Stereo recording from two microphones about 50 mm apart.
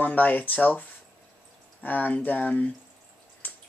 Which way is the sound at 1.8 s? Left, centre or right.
Left.